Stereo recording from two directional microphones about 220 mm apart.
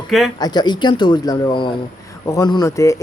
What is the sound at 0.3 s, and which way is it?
A man's voice, 20° left (ahead or behind).